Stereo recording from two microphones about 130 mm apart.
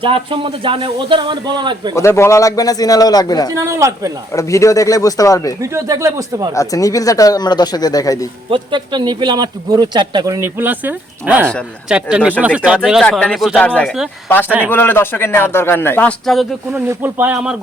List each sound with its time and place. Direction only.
0.0 s a man's voice: 45° right (ahead or behind)
2.0 s speech: 20° left (ahead or behind)
3.5 s speech: 20° right (ahead or behind)
4.4 s speech: 25° left (ahead or behind)
5.7 s speech: 25° right (ahead or behind)
6.5 s speech: 25° left (ahead or behind)
8.4 s a man's voice: 40° right (ahead or behind)
10.6 s speech: 15° right (ahead or behind)
13.1 s a man's voice: 10° left (ahead or behind)
13.8 s speech: 5° right (ahead or behind)
14.7 s a man's voice: 15° left (ahead or behind)
16.2 s speech: centre (ahead or behind)
16.7 s speech: 15° right (ahead or behind)